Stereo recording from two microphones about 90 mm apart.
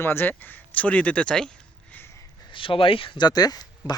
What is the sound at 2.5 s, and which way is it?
Speech, 75° left (ahead or behind).